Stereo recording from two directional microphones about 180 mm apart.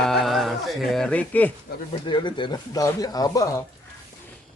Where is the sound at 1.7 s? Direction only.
60° left (ahead or behind).